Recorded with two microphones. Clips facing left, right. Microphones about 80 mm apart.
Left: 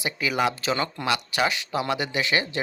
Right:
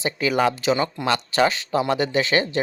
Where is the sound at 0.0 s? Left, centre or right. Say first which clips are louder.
Right 4 dB; right.